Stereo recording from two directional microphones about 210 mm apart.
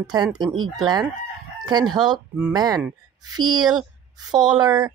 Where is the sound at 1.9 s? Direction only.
20° right (ahead or behind).